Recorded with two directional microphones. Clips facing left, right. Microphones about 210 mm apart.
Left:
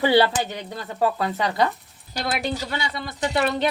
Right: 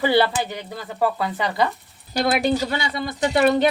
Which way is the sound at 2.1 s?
50° right (ahead or behind).